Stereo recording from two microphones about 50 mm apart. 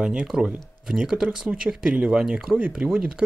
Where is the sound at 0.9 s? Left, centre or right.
Centre.